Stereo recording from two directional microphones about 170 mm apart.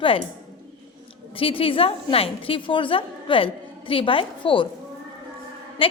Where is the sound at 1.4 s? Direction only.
35° left (ahead or behind).